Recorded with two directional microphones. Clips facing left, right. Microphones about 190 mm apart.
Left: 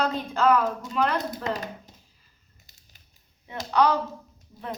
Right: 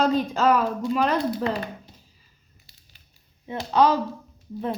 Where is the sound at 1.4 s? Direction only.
40° left (ahead or behind).